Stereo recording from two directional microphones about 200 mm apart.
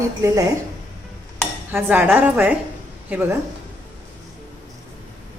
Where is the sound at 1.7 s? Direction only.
10° right (ahead or behind).